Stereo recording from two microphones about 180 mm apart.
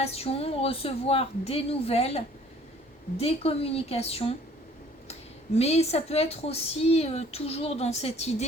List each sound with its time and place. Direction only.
0.0 s a woman's voice: 35° left (ahead or behind)
5.5 s a woman's voice: 35° left (ahead or behind)